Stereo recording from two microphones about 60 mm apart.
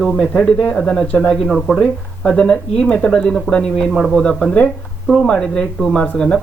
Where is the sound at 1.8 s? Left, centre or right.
Centre.